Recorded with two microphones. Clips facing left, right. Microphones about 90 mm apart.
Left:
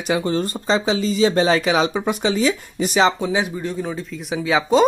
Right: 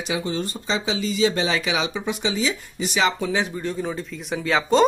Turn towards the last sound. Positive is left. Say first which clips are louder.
# left 3 dB
turn(degrees=5)  # may be behind; listen again after turning